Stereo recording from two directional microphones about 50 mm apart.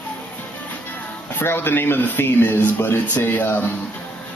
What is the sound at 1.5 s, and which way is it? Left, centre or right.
Speech, left.